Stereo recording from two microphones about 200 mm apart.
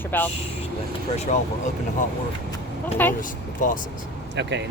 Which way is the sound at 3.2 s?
40° left (ahead or behind).